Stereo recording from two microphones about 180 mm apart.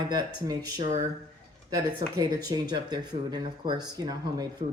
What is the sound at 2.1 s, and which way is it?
Speech, 20° right (ahead or behind).